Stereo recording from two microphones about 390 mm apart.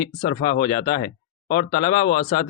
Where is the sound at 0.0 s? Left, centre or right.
Centre.